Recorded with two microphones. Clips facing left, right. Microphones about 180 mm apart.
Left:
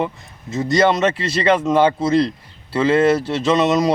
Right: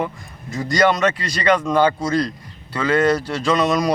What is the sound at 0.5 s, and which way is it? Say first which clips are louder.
Speech: left 2 dB; 25° left (ahead or behind).